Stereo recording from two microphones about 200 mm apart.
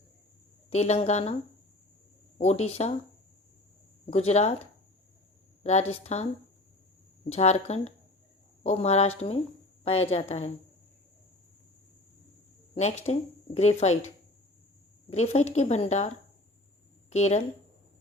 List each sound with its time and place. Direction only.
0.7 s speech: 35° left (ahead or behind)
2.4 s speech: 35° left (ahead or behind)
4.0 s speech: 30° left (ahead or behind)
5.6 s speech: 30° left (ahead or behind)
7.3 s a woman's voice: 30° left (ahead or behind)
12.7 s speech: 35° left (ahead or behind)
15.1 s speech: 35° left (ahead or behind)
17.1 s speech: 35° left (ahead or behind)